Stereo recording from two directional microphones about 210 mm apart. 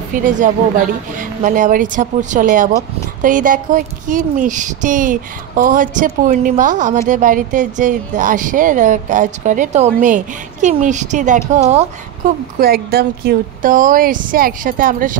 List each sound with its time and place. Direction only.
0.1 s speech: 40° right (ahead or behind)
12.5 s speech: 45° right (ahead or behind)